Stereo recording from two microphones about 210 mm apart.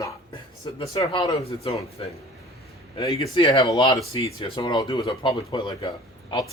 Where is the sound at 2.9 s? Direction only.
25° left (ahead or behind).